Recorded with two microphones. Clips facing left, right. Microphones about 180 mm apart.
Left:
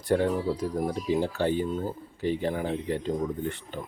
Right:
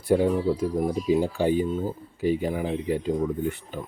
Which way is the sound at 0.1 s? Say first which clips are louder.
Right 3 dB; 10° right (ahead or behind).